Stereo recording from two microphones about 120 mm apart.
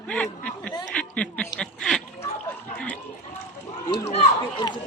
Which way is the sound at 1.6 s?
5° left (ahead or behind).